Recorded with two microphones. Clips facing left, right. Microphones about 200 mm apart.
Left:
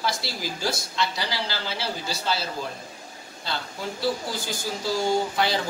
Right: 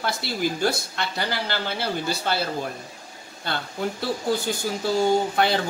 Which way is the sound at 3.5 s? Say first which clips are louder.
Right 2 dB; 55° right (ahead or behind).